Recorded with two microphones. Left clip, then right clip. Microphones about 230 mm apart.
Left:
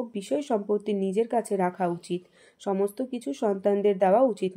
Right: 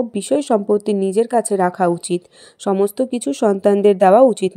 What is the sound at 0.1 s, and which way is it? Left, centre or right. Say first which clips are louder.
A woman's voice: right 8 dB; right.